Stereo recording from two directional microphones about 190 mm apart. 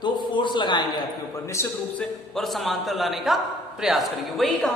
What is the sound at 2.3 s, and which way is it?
A man's voice, centre (ahead or behind).